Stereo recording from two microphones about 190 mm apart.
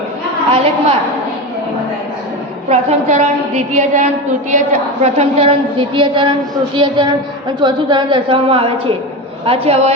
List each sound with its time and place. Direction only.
0.5 s a woman's voice: 35° right (ahead or behind)
2.6 s a woman's voice: 35° right (ahead or behind)
5.0 s a woman's voice: 35° right (ahead or behind)